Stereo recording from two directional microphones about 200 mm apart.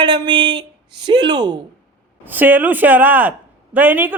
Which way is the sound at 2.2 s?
10° right (ahead or behind).